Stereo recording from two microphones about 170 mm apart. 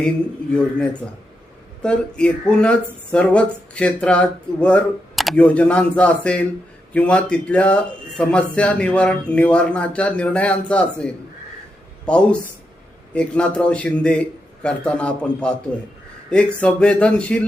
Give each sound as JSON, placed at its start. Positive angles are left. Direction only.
{"t": 0.5, "sound": "speech", "side_deg": 5}